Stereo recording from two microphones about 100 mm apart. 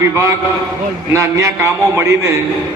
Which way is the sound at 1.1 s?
30° right (ahead or behind).